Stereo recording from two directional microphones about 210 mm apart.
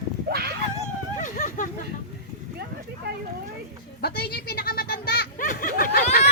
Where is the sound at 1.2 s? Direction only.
40° left (ahead or behind).